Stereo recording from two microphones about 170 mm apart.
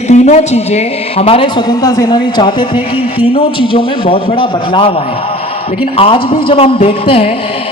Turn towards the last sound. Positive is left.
turn(degrees=35)  # may be behind; listen again after turning